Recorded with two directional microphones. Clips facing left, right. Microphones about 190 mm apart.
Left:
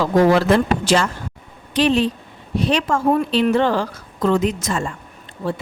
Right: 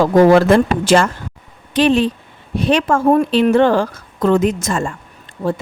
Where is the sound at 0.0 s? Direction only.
50° right (ahead or behind).